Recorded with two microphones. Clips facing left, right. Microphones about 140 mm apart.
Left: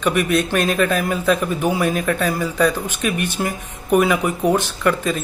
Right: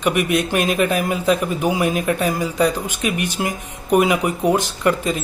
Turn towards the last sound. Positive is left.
turn(degrees=-15)  # may be behind; listen again after turning